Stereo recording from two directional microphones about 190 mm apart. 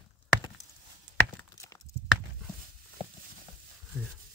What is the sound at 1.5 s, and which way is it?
Clip-clop, 15° left (ahead or behind).